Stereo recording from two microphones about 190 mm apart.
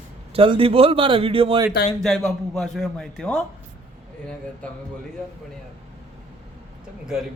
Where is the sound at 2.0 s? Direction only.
Centre (ahead or behind).